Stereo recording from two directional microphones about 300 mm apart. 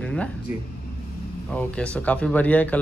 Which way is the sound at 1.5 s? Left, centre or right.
Centre.